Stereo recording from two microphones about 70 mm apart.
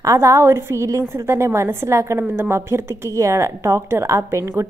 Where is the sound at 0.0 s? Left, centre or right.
Right.